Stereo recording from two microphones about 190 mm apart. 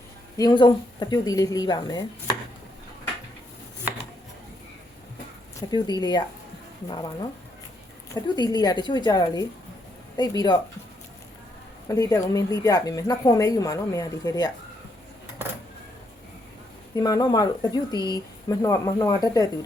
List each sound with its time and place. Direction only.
0.3 s speech: 25° left (ahead or behind)
5.7 s speech: 20° left (ahead or behind)
8.1 s speech: 20° left (ahead or behind)
11.9 s a woman's voice: 20° left (ahead or behind)
16.9 s speech: 20° left (ahead or behind)